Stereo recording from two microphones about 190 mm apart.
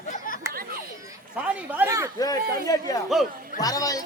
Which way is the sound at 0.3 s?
45° left (ahead or behind).